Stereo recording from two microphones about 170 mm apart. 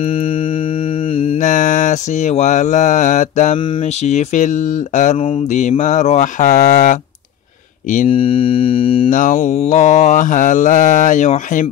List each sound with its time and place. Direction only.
1.1 s mantra: 35° left (ahead or behind)
1.4 s mantra: 50° left (ahead or behind)
4.0 s speech: 45° left (ahead or behind)
8.1 s music: 35° left (ahead or behind)
9.1 s speech: 50° left (ahead or behind)